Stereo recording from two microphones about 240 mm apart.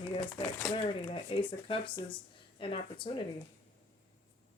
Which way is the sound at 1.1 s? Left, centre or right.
Left.